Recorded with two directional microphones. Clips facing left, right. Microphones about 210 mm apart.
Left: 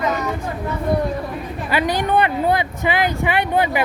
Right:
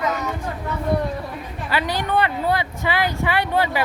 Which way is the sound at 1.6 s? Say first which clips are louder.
Left 4 dB; 15° left (ahead or behind).